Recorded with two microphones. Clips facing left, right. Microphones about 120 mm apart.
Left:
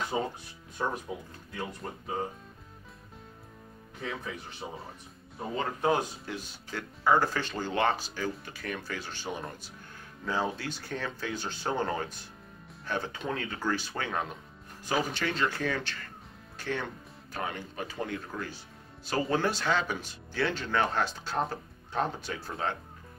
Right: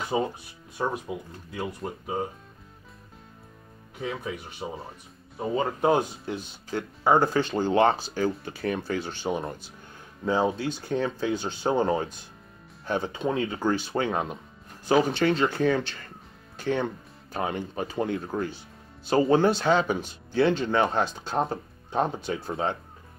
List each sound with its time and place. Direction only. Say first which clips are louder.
0.1 s speech: right 6 dB; 15° right (ahead or behind)
0.7 s speech: right 4 dB; 5° right (ahead or behind)
4.0 s speech: right 5 dB; 10° right (ahead or behind)
7.7 s speech: right 6 dB; 35° right (ahead or behind)